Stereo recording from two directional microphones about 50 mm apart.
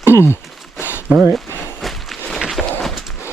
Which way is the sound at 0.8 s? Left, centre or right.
Left.